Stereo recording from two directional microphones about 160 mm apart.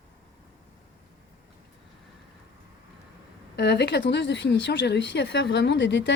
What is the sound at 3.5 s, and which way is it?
Speech, 90° left.